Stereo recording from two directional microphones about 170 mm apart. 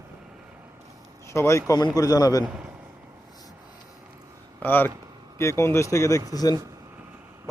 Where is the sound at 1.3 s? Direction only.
15° left (ahead or behind).